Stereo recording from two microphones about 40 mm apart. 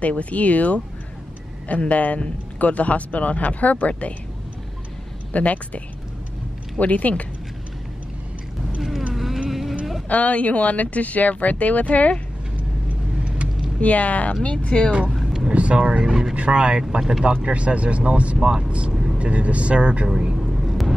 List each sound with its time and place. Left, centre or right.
0.0 s a man's voice: left
5.3 s a man's voice: left
6.8 s a man's voice: left
9.1 s vehicle: centre
9.5 s a sound: centre
10.0 s a man's voice: left
13.7 s a man's voice: left
15.2 s speech: right
16.1 s speech: centre
16.3 s speech: right
18.4 s speech: centre
18.7 s speech: right
20.3 s vehicle: centre